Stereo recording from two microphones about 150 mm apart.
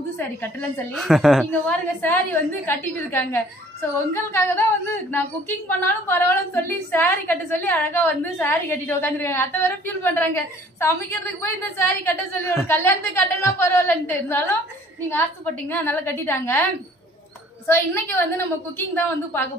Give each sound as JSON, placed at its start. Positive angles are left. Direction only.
{"t": 0.2, "sound": "a woman's voice", "side_deg": 10}
{"t": 0.9, "sound": "a woman's voice", "side_deg": 0}
{"t": 5.7, "sound": "a woman's voice", "side_deg": 15}
{"t": 15.7, "sound": "a woman's voice", "side_deg": 15}
{"t": 17.6, "sound": "a woman's voice", "side_deg": 15}